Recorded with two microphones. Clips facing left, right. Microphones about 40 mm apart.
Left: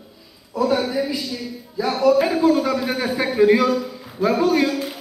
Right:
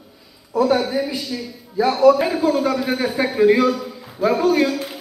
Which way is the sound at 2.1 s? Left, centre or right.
Centre.